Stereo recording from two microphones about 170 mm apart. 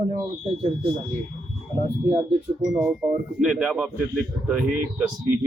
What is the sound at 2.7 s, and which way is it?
Speech, 5° right (ahead or behind).